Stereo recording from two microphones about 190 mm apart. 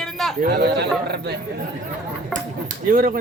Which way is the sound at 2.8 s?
50° right (ahead or behind).